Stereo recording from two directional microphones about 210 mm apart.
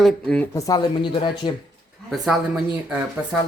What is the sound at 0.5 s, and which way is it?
Speech, 15° left (ahead or behind).